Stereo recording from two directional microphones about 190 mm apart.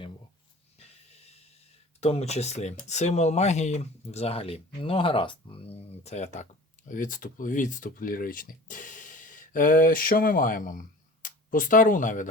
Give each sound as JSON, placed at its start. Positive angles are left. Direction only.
{"t": 2.0, "sound": "speech", "side_deg": 35}